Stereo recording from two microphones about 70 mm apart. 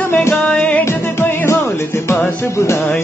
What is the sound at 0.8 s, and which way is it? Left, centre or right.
Music, left.